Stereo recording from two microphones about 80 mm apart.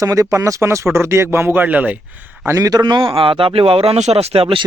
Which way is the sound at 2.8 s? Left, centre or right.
Right.